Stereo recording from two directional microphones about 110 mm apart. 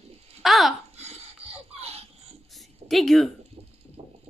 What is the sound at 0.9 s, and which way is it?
Filing, 75° right (ahead or behind).